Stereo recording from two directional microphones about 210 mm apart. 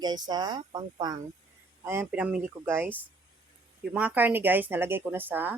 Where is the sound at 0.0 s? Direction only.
20° right (ahead or behind).